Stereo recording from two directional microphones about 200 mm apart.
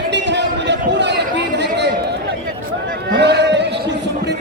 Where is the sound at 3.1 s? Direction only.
60° right (ahead or behind).